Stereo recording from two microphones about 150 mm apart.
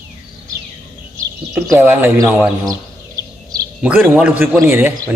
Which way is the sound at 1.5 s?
15° right (ahead or behind).